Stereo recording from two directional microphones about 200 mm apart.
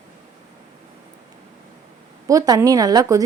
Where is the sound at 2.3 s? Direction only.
15° right (ahead or behind).